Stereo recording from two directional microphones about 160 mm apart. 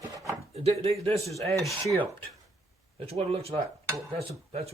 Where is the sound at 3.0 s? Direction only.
40° right (ahead or behind).